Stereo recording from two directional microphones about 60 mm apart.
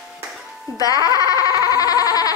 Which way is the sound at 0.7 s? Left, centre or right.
Left.